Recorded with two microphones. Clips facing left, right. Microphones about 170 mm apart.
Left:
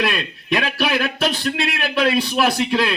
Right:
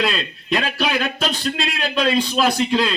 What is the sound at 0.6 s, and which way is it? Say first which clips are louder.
Speech: left 2 dB; 20° right (ahead or behind).